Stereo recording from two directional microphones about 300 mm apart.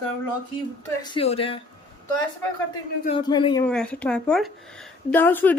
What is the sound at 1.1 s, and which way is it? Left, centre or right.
Speech, centre.